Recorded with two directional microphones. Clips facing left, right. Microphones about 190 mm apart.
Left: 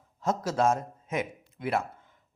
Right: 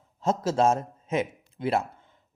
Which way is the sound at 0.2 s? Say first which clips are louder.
Right 3 dB; 25° right (ahead or behind).